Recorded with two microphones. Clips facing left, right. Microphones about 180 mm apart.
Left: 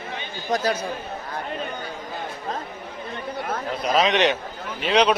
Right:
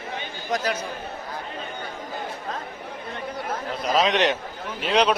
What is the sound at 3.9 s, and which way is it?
A man's voice, centre (ahead or behind).